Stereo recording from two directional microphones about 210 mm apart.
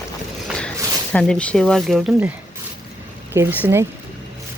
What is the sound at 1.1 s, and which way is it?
Speech, 5° left (ahead or behind).